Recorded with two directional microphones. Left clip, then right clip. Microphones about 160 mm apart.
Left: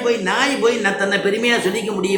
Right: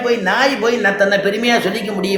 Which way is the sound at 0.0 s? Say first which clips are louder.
Right 3 dB; 45° right (ahead or behind).